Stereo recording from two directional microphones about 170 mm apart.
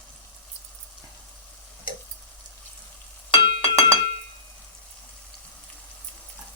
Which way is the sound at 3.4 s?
35° left (ahead or behind).